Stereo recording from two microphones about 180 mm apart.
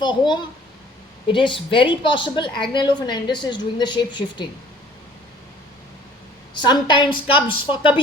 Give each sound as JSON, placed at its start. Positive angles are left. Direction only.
{"t": 0.0, "sound": "a woman's voice", "side_deg": 25}
{"t": 6.5, "sound": "a woman's voice", "side_deg": 25}